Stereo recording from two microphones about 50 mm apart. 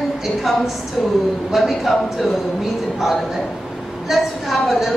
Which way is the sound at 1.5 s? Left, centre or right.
Centre.